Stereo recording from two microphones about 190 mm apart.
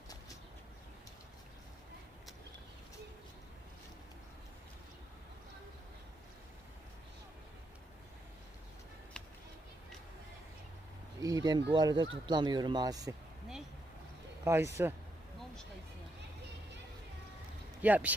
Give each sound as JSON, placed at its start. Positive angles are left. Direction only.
{"t": 9.2, "sound": "a sound", "side_deg": 5}
{"t": 11.2, "sound": "speech", "side_deg": -20}
{"t": 14.4, "sound": "speech", "side_deg": -15}
{"t": 17.8, "sound": "speech", "side_deg": -10}